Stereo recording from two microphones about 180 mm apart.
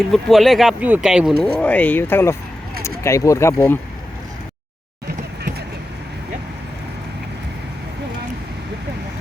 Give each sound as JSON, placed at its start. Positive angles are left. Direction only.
{"t": 0.1, "sound": "speech", "side_deg": 0}
{"t": 1.6, "sound": "speech", "side_deg": 10}